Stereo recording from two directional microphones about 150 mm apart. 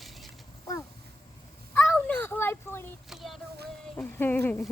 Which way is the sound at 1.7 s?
10° left (ahead or behind).